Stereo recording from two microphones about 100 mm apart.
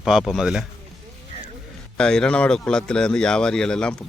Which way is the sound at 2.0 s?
10° left (ahead or behind).